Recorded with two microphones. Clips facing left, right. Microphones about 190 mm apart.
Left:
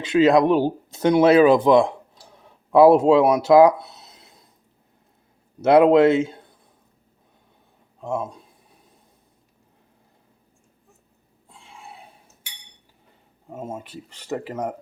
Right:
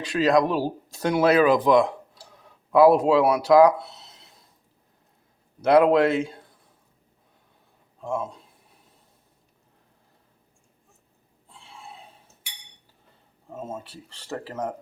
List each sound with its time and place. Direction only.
0.0 s speech: 25° left (ahead or behind)
5.6 s speech: 25° left (ahead or behind)
8.0 s speech: 20° left (ahead or behind)
11.4 s a sound: 15° left (ahead or behind)
13.5 s speech: 15° left (ahead or behind)